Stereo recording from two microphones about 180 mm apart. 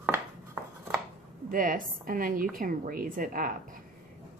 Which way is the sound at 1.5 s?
50° right (ahead or behind).